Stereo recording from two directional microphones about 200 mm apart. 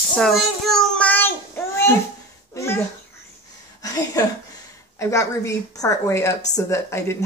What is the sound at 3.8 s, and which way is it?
A woman's voice, 20° left (ahead or behind).